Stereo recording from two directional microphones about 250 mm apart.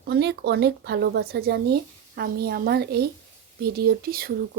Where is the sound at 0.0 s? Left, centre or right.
Right.